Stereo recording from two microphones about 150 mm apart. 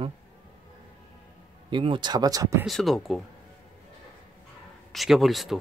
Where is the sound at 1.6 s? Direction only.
35° right (ahead or behind).